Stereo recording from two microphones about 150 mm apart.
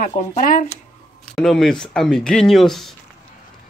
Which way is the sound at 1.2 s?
Centre (ahead or behind).